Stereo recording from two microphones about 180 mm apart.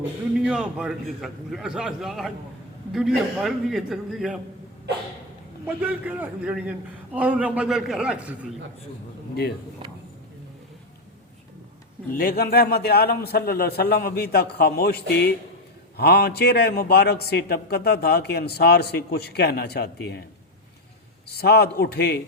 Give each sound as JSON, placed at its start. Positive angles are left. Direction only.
{"t": 0.3, "sound": "a man's voice", "side_deg": -5}
{"t": 5.6, "sound": "a man's voice", "side_deg": -10}
{"t": 12.1, "sound": "a man's voice", "side_deg": 55}
{"t": 21.2, "sound": "a man's voice", "side_deg": 65}